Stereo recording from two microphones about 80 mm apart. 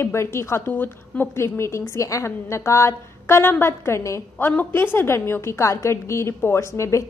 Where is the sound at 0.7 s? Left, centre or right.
Left.